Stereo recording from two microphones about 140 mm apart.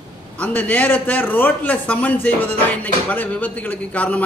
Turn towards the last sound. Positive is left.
turn(degrees=10)  # may be behind; listen again after turning